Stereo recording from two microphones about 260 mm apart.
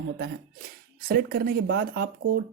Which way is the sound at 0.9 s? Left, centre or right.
Right.